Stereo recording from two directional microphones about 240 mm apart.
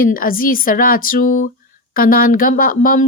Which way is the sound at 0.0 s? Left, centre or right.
Left.